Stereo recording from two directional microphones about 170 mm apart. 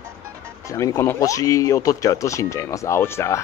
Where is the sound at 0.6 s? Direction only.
20° left (ahead or behind).